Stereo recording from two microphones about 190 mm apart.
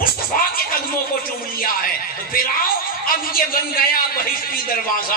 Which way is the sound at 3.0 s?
50° left (ahead or behind).